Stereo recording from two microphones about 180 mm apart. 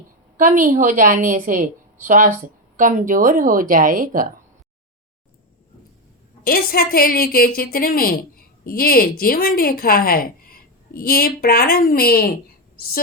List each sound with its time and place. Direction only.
0.3 s a woman's voice: 45° right (ahead or behind)
6.4 s a woman's voice: 55° left (ahead or behind)